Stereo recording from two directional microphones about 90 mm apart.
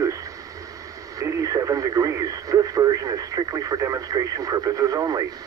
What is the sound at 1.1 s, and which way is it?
Speech, 40° right (ahead or behind).